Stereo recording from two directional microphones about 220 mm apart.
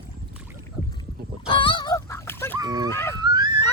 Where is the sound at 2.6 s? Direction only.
15° right (ahead or behind).